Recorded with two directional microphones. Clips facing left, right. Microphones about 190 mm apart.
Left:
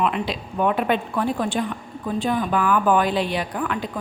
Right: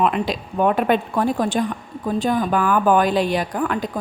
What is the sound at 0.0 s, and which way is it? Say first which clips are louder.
A woman's voice: right 3 dB; 45° right (ahead or behind).